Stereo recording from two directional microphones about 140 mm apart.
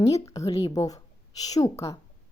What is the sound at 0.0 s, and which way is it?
A woman's voice, 25° left (ahead or behind).